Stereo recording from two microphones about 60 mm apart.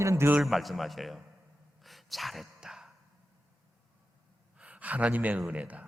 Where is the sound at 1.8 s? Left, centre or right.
Centre.